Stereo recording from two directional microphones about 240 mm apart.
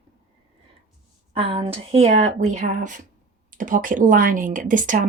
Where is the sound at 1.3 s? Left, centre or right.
Right.